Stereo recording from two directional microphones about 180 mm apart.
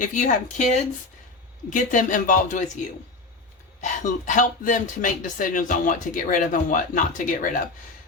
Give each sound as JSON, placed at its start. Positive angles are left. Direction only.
{"t": 0.0, "sound": "speech", "side_deg": 45}
{"t": 3.8, "sound": "speech", "side_deg": 45}